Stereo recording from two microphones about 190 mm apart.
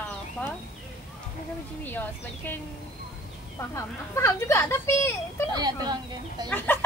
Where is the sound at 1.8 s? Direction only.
10° left (ahead or behind).